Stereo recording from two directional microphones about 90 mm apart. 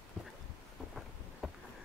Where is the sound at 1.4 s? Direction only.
Centre (ahead or behind).